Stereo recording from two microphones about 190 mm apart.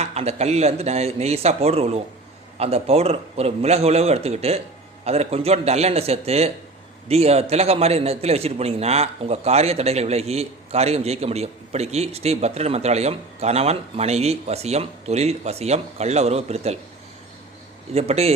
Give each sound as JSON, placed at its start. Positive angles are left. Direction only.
{"t": 0.0, "sound": "a man's voice", "side_deg": -35}
{"t": 17.9, "sound": "a man's voice", "side_deg": -35}